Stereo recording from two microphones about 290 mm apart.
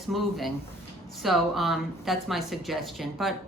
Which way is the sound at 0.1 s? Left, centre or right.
Centre.